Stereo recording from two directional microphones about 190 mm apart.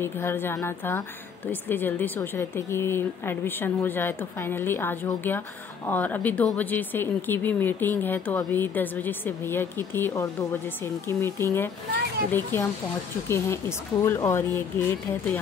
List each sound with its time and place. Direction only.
0.0 s speech: 10° left (ahead or behind)